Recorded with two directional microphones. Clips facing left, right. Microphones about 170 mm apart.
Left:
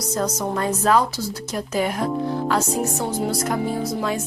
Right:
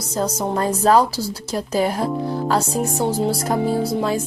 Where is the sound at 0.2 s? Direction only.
30° right (ahead or behind).